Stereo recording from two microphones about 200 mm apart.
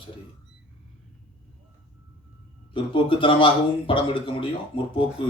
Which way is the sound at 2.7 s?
25° left (ahead or behind).